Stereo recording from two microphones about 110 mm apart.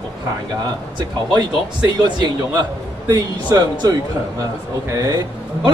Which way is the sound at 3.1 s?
35° right (ahead or behind).